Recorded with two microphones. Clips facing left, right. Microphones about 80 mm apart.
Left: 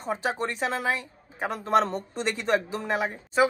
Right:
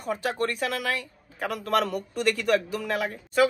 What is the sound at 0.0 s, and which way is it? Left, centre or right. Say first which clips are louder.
A man's voice: right 1 dB; left.